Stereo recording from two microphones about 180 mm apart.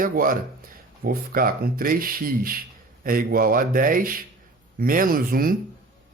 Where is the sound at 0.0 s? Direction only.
50° right (ahead or behind).